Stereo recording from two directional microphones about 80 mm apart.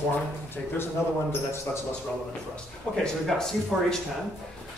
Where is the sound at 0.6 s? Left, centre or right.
Centre.